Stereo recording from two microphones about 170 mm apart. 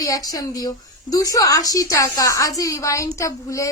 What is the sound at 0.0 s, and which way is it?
A woman's voice, 20° left (ahead or behind).